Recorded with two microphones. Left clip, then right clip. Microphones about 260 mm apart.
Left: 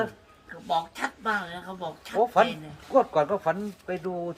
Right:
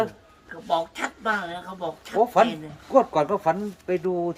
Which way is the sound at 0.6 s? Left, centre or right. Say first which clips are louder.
Right 2 dB; centre.